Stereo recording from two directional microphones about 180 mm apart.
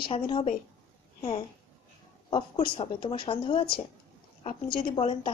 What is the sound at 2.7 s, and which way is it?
Speech, 30° left (ahead or behind).